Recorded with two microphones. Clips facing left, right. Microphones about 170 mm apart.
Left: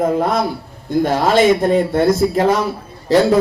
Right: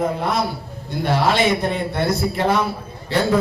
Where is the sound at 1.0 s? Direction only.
45° left (ahead or behind).